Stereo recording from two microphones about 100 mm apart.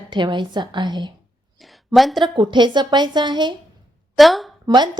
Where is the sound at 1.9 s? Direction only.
Centre (ahead or behind).